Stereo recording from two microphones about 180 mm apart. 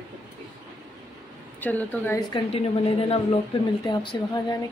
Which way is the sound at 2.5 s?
35° left (ahead or behind).